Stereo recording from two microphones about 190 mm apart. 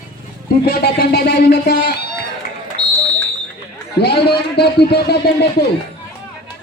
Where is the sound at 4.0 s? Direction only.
60° left (ahead or behind).